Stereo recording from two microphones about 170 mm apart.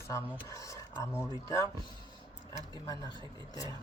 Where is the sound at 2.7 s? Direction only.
25° left (ahead or behind).